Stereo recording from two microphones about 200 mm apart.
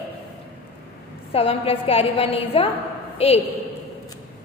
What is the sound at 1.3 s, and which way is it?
A woman's voice, 30° left (ahead or behind).